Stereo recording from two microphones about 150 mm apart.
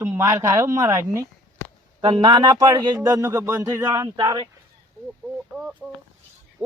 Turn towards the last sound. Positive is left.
turn(degrees=-5)  # may be behind; listen again after turning